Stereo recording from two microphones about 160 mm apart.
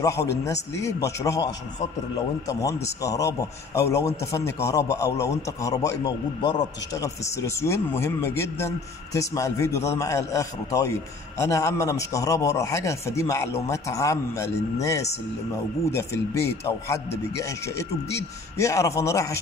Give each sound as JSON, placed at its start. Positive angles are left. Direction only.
{"t": 0.0, "sound": "a man's voice", "side_deg": 20}